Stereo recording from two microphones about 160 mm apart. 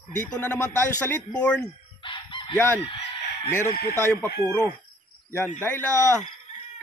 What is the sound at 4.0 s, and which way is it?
Speech, 15° left (ahead or behind).